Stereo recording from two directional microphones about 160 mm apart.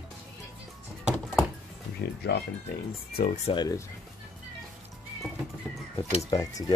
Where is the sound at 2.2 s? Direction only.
90° left.